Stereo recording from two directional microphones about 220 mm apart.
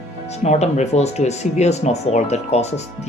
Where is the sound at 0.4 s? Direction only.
30° left (ahead or behind).